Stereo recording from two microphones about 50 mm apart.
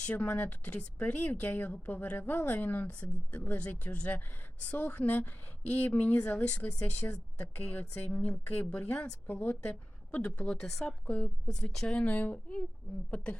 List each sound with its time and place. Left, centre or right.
0.0 s a woman's voice: left
9.2 s a woman's voice: left
11.4 s speech: centre
12.0 s a woman's voice: left